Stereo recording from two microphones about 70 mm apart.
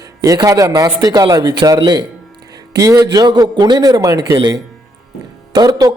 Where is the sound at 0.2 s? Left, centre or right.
Right.